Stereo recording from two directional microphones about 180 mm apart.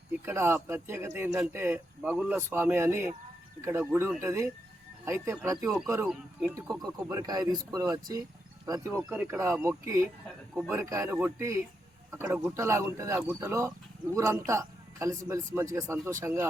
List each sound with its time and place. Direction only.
0.3 s speech: 15° right (ahead or behind)
6.1 s speech: centre (ahead or behind)
6.6 s speech: 20° right (ahead or behind)